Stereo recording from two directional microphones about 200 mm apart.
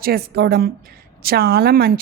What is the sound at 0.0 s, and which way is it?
A woman's voice, 50° right (ahead or behind).